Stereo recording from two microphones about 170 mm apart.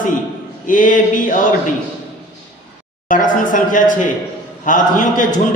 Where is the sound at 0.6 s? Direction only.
50° left (ahead or behind).